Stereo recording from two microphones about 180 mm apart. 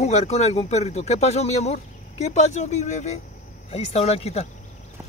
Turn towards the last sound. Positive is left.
turn(degrees=35)  # may be behind; listen again after turning